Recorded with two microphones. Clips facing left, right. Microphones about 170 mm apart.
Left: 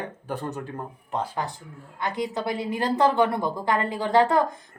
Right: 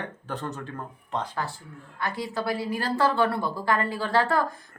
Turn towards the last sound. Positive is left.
turn(degrees=20)  # may be behind; listen again after turning